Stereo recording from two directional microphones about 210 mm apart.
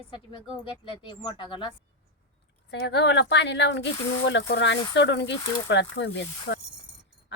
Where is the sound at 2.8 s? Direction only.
55° left (ahead or behind).